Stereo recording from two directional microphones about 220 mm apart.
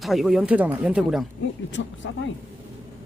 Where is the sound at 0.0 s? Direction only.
Centre (ahead or behind).